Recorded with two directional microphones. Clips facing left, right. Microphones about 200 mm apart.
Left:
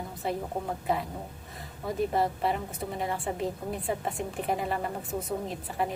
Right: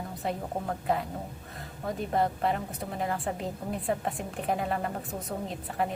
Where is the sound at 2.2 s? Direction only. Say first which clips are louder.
Even; centre (ahead or behind).